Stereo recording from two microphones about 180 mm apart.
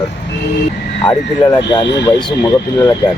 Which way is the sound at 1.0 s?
25° left (ahead or behind).